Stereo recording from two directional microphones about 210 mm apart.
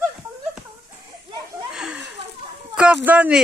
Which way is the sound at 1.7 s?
5° right (ahead or behind).